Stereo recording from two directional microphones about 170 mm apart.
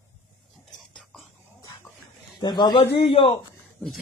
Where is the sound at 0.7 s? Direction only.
5° left (ahead or behind).